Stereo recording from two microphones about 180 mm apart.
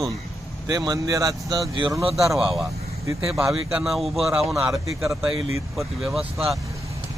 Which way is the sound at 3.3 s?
5° right (ahead or behind).